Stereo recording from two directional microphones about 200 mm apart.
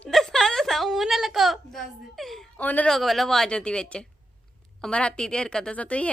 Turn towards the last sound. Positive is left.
turn(degrees=5)  # may be behind; listen again after turning